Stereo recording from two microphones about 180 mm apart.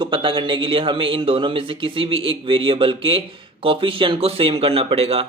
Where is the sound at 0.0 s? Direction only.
25° right (ahead or behind).